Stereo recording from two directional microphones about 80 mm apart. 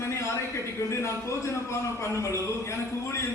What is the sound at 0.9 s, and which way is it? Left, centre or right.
A man's voice, left.